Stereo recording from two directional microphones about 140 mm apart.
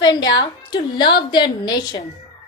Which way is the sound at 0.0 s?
30° left (ahead or behind).